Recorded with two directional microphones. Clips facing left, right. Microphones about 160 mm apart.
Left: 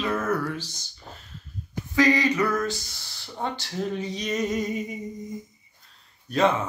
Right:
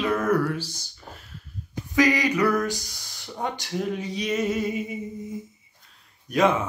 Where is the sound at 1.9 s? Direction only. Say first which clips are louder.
Even; 15° right (ahead or behind).